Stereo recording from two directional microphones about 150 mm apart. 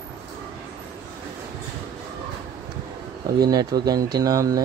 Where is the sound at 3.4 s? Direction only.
25° right (ahead or behind).